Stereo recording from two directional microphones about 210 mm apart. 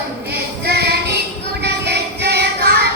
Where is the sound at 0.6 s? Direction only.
50° right (ahead or behind).